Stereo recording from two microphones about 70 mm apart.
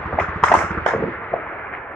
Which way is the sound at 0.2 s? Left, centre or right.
Centre.